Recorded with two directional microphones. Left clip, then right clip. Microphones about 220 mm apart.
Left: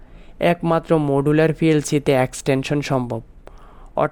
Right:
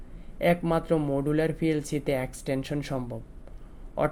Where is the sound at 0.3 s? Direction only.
45° left (ahead or behind).